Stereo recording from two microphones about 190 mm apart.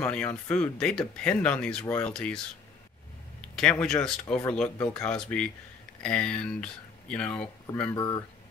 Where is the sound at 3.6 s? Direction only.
5° left (ahead or behind).